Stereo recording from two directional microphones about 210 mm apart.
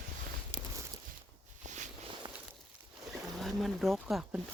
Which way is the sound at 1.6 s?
35° right (ahead or behind).